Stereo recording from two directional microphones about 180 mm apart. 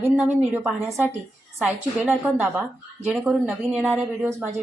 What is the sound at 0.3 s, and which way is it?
A woman's voice, 10° right (ahead or behind).